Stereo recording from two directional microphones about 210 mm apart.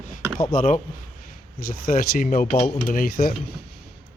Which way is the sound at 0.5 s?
35° left (ahead or behind).